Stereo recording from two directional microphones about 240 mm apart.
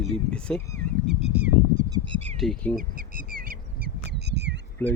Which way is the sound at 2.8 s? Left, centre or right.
Right.